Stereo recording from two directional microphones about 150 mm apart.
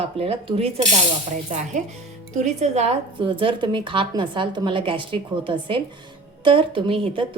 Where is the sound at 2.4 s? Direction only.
50° right (ahead or behind).